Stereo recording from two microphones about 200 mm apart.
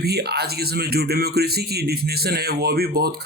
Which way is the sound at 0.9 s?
50° right (ahead or behind).